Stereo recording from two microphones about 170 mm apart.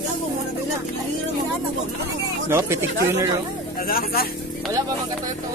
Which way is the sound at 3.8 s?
60° left (ahead or behind).